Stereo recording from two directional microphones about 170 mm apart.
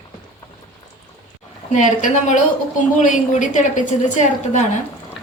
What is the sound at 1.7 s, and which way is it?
A woman's voice, 45° left (ahead or behind).